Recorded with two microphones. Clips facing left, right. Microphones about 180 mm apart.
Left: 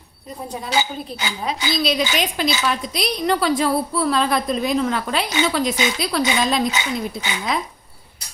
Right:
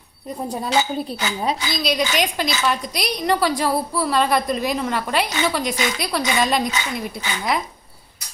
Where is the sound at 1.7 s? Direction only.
Centre (ahead or behind).